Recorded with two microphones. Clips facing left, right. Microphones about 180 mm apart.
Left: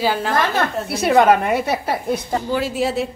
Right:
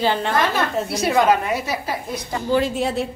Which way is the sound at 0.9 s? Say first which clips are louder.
Left 4 dB; 60° left (ahead or behind).